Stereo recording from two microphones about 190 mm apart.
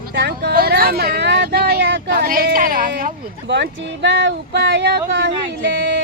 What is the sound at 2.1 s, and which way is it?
Speech, 50° right (ahead or behind).